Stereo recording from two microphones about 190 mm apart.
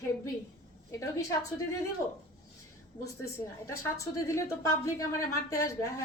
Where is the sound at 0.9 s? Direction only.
15° left (ahead or behind).